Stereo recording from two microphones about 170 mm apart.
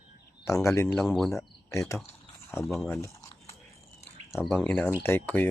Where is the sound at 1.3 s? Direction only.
15° left (ahead or behind).